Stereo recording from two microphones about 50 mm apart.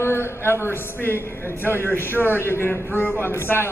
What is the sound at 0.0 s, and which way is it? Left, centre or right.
A man's voice, left.